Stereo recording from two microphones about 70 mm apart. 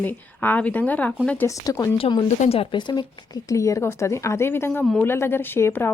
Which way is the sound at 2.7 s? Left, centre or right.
Left.